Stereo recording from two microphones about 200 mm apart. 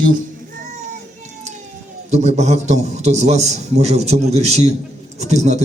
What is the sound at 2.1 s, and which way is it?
A man's voice, 35° right (ahead or behind).